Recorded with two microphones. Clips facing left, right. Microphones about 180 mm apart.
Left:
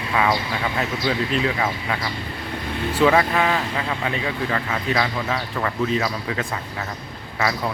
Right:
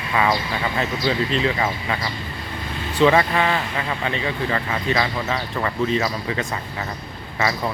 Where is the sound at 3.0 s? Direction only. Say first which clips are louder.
Right 1 dB; 5° left (ahead or behind).